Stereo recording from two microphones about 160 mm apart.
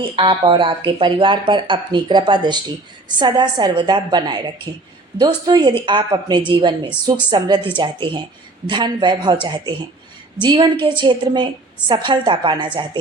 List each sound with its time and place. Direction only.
0.0 s a woman's voice: 35° right (ahead or behind)